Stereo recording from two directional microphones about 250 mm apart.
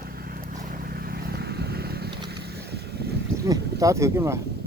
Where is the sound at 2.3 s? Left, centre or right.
Right.